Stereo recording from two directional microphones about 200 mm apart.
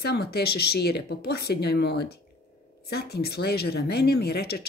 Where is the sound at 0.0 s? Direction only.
55° left (ahead or behind).